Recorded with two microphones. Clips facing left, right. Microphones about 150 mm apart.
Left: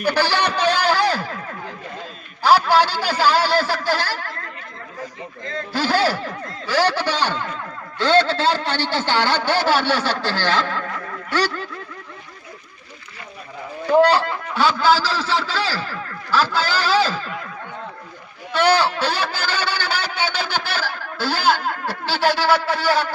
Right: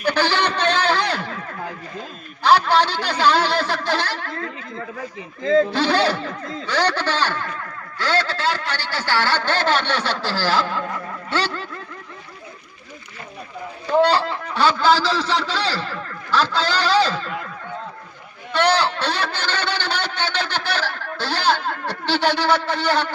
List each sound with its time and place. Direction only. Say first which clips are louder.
0.0 s a man's voice: even; 10° left (ahead or behind)
2.4 s speech: left 1 dB; 5° left (ahead or behind)
5.7 s speech: right 1 dB; 5° left (ahead or behind)
7.9 s a man's voice: left 6 dB; 25° left (ahead or behind); by 10.8 s 10° right (ahead or behind)
11.3 s speech: left 2 dB; 30° right (ahead or behind)
13.9 s speech: left 2 dB; centre (ahead or behind)
18.5 s speech: left 1 dB; 5° left (ahead or behind)